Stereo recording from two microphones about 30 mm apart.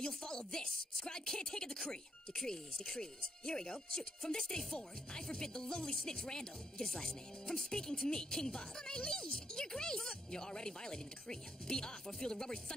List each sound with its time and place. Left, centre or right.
0.1 s a woman's voice: left